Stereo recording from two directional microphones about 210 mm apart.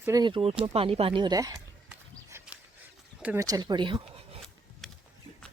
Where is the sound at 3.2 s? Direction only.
5° right (ahead or behind).